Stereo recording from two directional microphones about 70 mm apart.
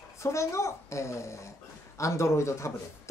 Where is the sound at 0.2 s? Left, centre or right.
Left.